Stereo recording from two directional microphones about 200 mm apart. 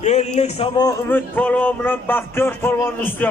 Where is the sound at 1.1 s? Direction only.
10° left (ahead or behind).